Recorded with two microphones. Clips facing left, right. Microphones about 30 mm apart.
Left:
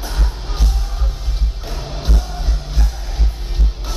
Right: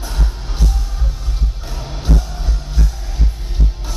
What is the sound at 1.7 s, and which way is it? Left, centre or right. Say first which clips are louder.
Music: right 4 dB; centre.